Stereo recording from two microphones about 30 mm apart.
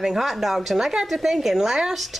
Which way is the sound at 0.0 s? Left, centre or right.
Centre.